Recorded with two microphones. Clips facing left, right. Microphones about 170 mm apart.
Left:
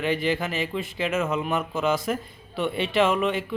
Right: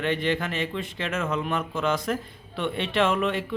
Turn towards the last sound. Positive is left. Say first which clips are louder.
# left 1 dB
turn(degrees=0)  # may be behind; listen again after turning